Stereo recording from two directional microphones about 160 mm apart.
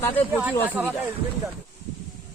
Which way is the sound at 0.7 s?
10° right (ahead or behind).